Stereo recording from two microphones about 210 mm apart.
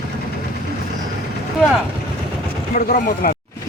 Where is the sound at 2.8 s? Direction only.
45° left (ahead or behind).